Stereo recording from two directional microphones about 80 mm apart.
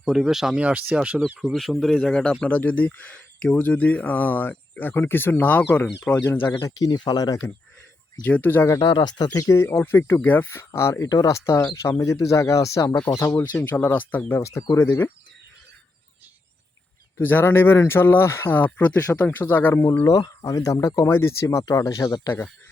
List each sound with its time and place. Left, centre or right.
0.0 s speech: centre
0.6 s speech: centre
2.0 s speech: centre; by 6.5 s left
6.5 s speech: left
8.2 s speech: left
8.8 s speech: left
13.0 s speech: left
14.3 s speech: left
17.2 s speech: left
20.1 s speech: left